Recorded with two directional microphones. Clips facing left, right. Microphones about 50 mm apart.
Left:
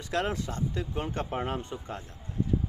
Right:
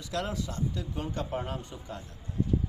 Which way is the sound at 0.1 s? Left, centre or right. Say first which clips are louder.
Left 3 dB; left.